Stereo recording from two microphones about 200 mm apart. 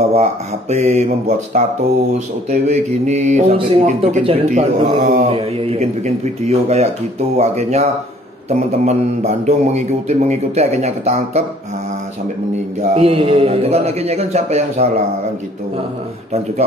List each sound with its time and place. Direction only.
0.1 s speech: 35° right (ahead or behind)
12.9 s speech: 30° right (ahead or behind)